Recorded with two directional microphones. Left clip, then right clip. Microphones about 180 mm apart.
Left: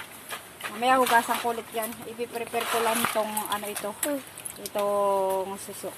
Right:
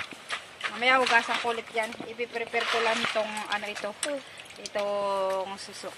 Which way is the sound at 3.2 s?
15° right (ahead or behind).